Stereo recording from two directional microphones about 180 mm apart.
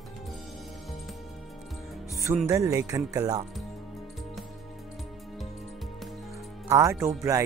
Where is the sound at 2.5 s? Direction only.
20° right (ahead or behind).